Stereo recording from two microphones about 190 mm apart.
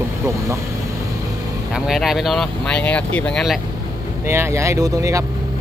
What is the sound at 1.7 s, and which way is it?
Speech, centre (ahead or behind).